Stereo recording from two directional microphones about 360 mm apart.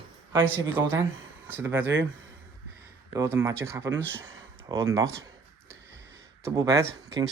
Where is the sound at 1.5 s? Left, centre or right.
Centre.